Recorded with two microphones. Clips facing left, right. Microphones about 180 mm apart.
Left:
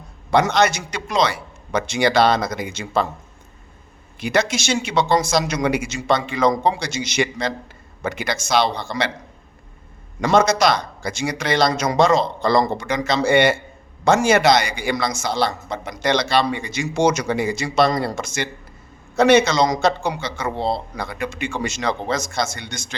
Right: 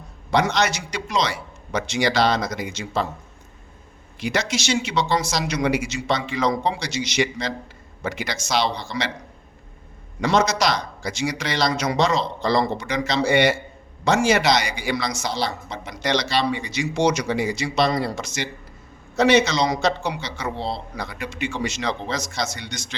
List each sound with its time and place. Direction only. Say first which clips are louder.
0.3 s a man's voice: left 4 dB; 50° left (ahead or behind)
4.2 s a man's voice: left 4 dB; 55° left (ahead or behind)
10.2 s a man's voice: left 4 dB; 50° left (ahead or behind)